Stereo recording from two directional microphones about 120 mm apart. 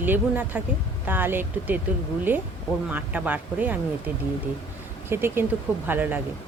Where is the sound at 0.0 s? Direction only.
15° right (ahead or behind).